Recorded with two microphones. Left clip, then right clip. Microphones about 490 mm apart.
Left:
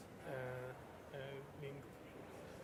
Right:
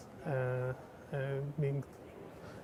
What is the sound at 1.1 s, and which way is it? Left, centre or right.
Speech, right.